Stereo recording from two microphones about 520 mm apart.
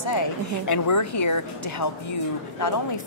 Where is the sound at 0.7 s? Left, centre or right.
Left.